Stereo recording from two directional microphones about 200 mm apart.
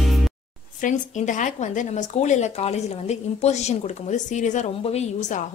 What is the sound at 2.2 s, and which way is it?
Speech, 35° left (ahead or behind).